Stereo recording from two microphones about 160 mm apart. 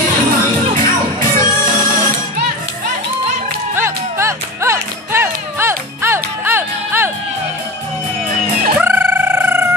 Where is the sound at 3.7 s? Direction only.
15° right (ahead or behind).